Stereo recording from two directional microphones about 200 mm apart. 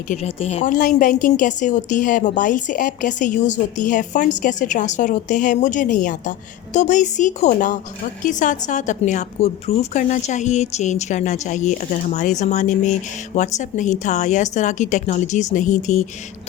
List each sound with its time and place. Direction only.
0.1 s a woman's voice: 30° left (ahead or behind)